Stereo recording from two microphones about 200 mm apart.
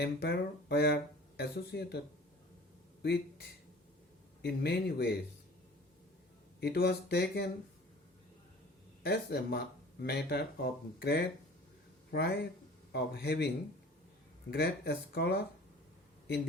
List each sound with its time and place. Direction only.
0.0 s speech: 55° left (ahead or behind)
4.4 s speech: 55° left (ahead or behind)
6.6 s speech: 55° left (ahead or behind)
9.0 s speech: 55° left (ahead or behind)
14.5 s speech: 55° left (ahead or behind)